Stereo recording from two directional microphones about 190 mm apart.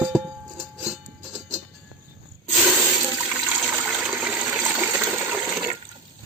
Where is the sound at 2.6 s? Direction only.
15° right (ahead or behind).